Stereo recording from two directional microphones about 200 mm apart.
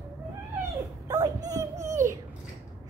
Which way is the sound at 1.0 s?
20° right (ahead or behind).